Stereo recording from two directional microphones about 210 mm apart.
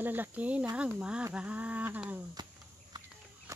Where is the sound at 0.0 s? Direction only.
10° right (ahead or behind).